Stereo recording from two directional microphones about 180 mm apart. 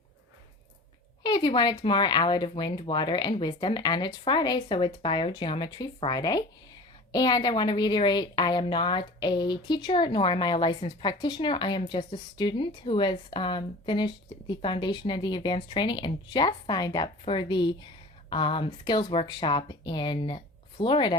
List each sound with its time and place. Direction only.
1.2 s a woman's voice: 25° left (ahead or behind)